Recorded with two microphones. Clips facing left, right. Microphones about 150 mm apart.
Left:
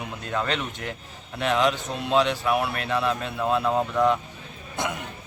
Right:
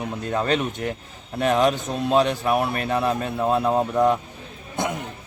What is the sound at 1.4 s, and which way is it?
Speech, 45° right (ahead or behind).